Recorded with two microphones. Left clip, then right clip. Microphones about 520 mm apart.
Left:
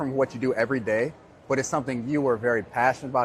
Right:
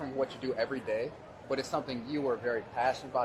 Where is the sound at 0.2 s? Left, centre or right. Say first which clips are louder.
Left 8 dB; left.